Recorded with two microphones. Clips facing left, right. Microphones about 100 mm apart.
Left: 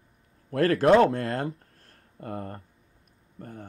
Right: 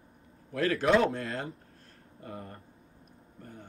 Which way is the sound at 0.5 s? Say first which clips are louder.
Left 6 dB; 50° left (ahead or behind).